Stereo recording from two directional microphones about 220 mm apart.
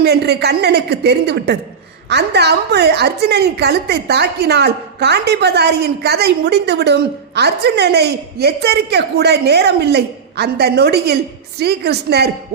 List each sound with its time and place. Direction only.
0.0 s a woman's voice: 50° right (ahead or behind)